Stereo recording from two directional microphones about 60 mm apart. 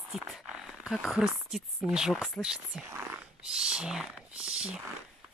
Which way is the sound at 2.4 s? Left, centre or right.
Left.